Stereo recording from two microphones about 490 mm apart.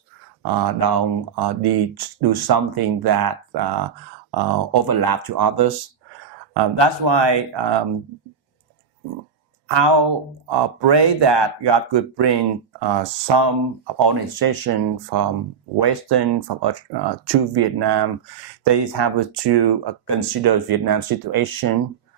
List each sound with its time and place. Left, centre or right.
0.4 s speech: right
6.5 s speech: right
9.6 s speech: right